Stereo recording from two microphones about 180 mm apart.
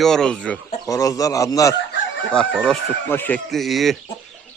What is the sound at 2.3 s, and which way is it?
Speech, 5° left (ahead or behind).